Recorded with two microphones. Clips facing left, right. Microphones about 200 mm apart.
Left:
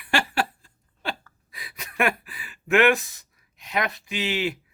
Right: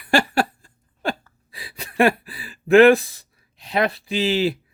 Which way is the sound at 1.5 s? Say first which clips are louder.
Right 5 dB; 30° right (ahead or behind).